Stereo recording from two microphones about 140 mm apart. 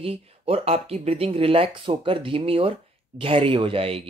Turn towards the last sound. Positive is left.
turn(degrees=-40)  # may be behind; listen again after turning